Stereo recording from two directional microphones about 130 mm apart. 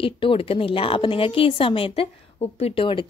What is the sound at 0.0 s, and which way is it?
A woman's voice, 45° left (ahead or behind).